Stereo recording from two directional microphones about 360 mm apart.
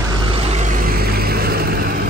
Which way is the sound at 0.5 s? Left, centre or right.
Right.